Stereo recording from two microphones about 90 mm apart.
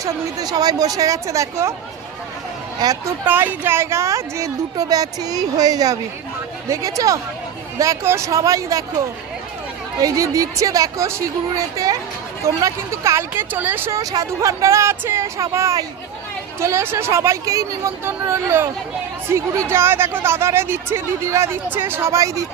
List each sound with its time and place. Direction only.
0.0 s speech: 45° right (ahead or behind)
3.2 s a woman's voice: 25° right (ahead or behind)
13.9 s a woman's voice: 40° right (ahead or behind)